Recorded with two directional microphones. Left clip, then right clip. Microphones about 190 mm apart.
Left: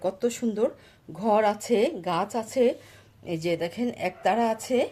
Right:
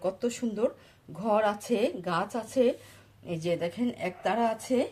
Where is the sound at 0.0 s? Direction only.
45° left (ahead or behind).